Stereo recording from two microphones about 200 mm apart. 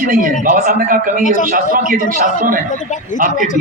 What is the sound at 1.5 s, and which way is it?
A man's voice, 45° right (ahead or behind).